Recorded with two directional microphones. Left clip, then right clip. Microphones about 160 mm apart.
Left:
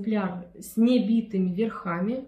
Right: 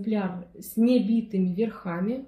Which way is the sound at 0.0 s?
10° left (ahead or behind).